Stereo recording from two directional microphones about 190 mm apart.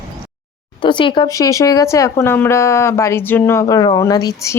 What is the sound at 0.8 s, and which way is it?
Speech, 25° left (ahead or behind).